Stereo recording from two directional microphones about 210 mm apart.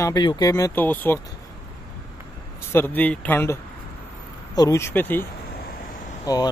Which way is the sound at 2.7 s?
10° left (ahead or behind).